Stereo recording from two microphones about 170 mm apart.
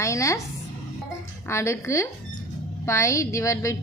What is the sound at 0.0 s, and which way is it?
Speech, 20° left (ahead or behind).